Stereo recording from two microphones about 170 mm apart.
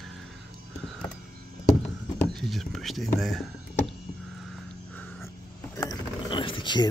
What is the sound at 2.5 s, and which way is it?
Whispering, centre (ahead or behind).